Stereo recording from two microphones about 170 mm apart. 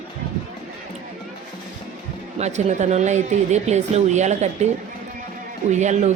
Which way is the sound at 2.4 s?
45° right (ahead or behind).